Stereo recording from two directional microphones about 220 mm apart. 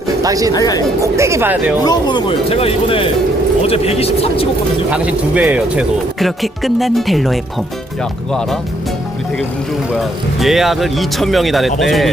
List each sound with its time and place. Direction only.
0.2 s speech: 15° right (ahead or behind)
0.5 s speech: 15° left (ahead or behind)
1.0 s speech: 15° right (ahead or behind)
1.8 s speech: 20° left (ahead or behind)
4.9 s speech: 5° right (ahead or behind)
9.9 s speech: centre (ahead or behind)